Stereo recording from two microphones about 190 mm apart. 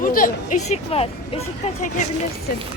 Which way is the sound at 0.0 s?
45° left (ahead or behind).